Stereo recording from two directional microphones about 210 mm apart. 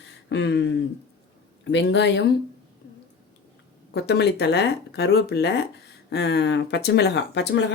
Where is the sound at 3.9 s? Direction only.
50° left (ahead or behind).